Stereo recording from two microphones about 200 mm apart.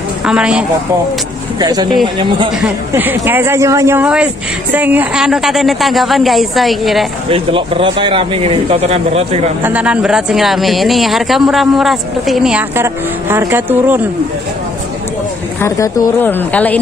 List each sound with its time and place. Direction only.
0.2 s a woman's voice: 5° right (ahead or behind)
1.6 s speech: 20° right (ahead or behind)
2.9 s speech: 10° right (ahead or behind)
7.2 s speech: 25° right (ahead or behind)
9.6 s speech: 10° right (ahead or behind)
16.2 s a woman's voice: 10° left (ahead or behind)